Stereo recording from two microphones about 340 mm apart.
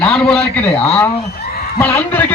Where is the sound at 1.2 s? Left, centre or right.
Left.